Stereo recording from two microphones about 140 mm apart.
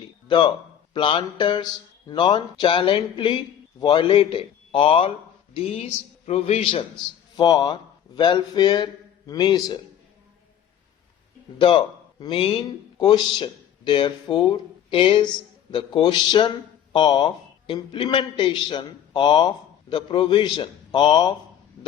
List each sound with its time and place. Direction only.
0.3 s a man's voice: 35° left (ahead or behind)
7.3 s a man's voice: 30° left (ahead or behind)
11.6 s speech: 35° left (ahead or behind)